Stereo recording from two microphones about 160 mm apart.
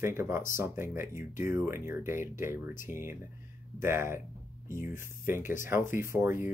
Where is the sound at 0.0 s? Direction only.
15° right (ahead or behind).